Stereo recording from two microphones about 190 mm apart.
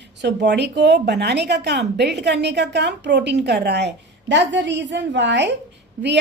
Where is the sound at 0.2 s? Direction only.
65° right (ahead or behind).